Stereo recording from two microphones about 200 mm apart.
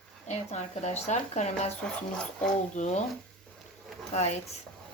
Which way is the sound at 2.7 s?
35° left (ahead or behind).